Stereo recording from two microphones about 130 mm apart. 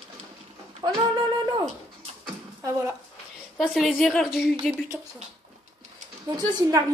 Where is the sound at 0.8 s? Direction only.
35° right (ahead or behind).